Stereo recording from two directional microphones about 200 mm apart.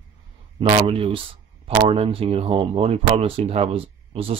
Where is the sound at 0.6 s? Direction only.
30° right (ahead or behind).